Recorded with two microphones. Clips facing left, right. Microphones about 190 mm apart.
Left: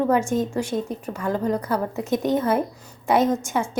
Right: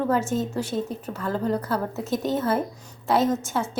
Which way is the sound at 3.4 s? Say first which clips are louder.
Left 2 dB; 15° left (ahead or behind).